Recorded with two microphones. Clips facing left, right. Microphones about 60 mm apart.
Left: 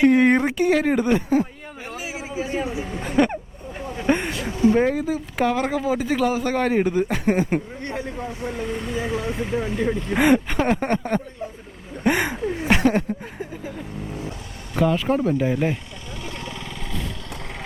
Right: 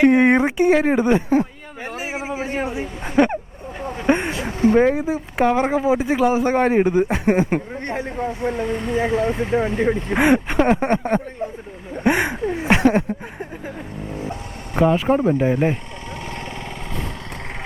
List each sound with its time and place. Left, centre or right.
0.1 s speech: right
1.3 s speech: right
3.8 s a sound: right
4.0 s speech: right
4.5 s speech: right
4.8 s speech: right
12.0 s a sound: right
13.4 s vehicle: right
14.8 s speech: right